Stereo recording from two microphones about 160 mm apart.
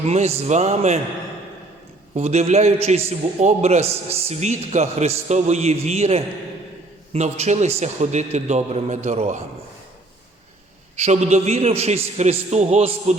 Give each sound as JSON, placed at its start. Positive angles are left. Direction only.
{"t": 0.0, "sound": "a man's voice", "side_deg": -40}
{"t": 2.1, "sound": "a man's voice", "side_deg": -45}
{"t": 10.9, "sound": "a man's voice", "side_deg": -45}